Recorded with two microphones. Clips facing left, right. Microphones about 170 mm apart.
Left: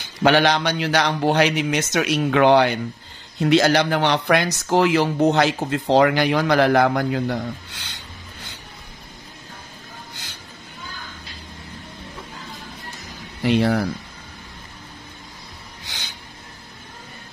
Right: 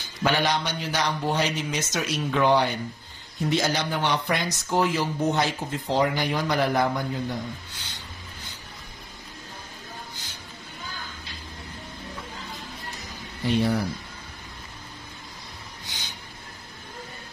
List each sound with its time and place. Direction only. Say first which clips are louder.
0.2 s a man's voice: left 7 dB; 75° left (ahead or behind)
13.4 s speech: left 5 dB; 80° left